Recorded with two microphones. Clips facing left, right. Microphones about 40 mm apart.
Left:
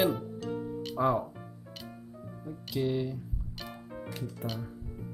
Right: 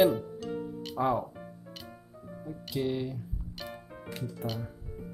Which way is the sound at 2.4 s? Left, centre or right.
Centre.